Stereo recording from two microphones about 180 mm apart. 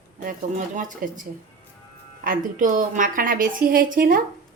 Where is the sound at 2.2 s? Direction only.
45° right (ahead or behind).